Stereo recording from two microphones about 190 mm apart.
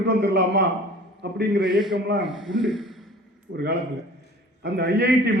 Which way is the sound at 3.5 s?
65° right (ahead or behind).